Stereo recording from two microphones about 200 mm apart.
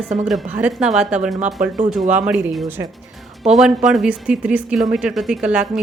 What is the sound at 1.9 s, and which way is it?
Speech, 5° right (ahead or behind).